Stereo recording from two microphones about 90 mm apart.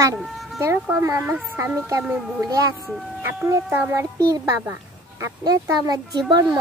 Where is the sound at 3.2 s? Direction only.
25° right (ahead or behind).